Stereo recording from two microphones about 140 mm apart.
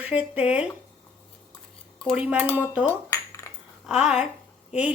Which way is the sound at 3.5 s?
20° left (ahead or behind).